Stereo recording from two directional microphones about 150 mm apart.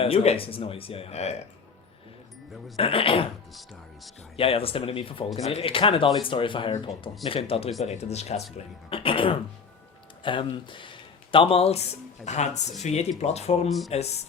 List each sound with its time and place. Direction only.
0.0 s speech: 40° left (ahead or behind)
2.7 s speech: 40° left (ahead or behind)
4.4 s speech: 40° left (ahead or behind)
13.7 s speech: centre (ahead or behind)